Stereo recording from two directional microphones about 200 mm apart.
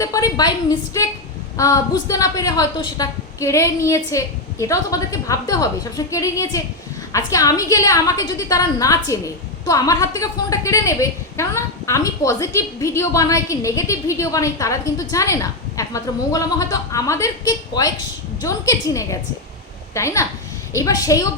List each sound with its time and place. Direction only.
0.0 s a woman's voice: 15° left (ahead or behind)